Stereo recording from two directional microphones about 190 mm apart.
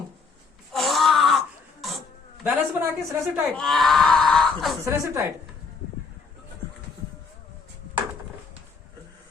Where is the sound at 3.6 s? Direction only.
Centre (ahead or behind).